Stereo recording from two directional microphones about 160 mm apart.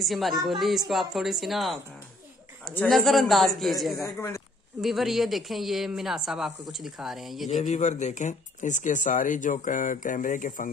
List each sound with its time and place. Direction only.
0.0 s speech: centre (ahead or behind)
4.0 s speech: 15° left (ahead or behind)
4.8 s speech: centre (ahead or behind)
7.6 s speech: 45° left (ahead or behind)